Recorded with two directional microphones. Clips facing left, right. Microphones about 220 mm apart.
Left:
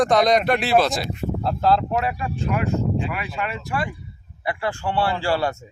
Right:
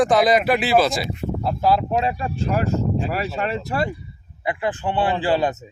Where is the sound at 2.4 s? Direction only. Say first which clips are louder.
Right 1 dB; 35° right (ahead or behind).